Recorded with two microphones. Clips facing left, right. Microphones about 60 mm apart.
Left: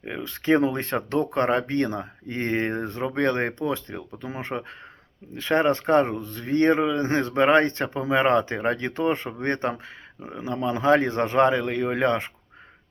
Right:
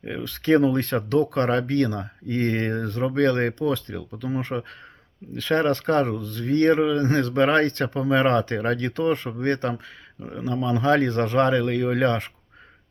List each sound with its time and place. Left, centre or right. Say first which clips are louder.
0.0 s speech: right 1 dB; left